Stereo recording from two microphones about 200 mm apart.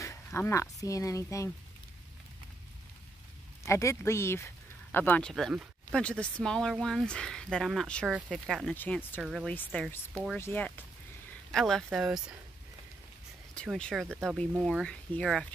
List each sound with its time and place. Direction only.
0.0 s speech: 15° left (ahead or behind)
3.6 s speech: 15° left (ahead or behind); by 12.4 s centre (ahead or behind)
13.6 s speech: 5° left (ahead or behind)